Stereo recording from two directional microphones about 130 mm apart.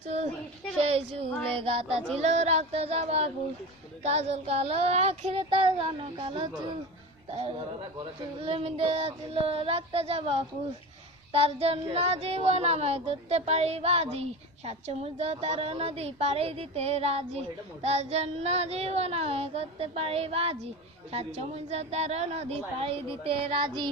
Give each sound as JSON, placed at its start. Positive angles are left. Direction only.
{"t": 0.8, "sound": "speech", "side_deg": -50}
{"t": 2.1, "sound": "speech", "side_deg": -60}
{"t": 8.4, "sound": "a woman's voice", "side_deg": -45}